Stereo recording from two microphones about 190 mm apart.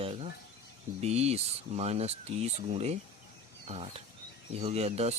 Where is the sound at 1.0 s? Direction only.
35° right (ahead or behind).